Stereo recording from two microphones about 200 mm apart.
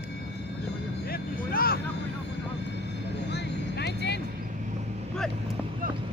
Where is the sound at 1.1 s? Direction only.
50° left (ahead or behind).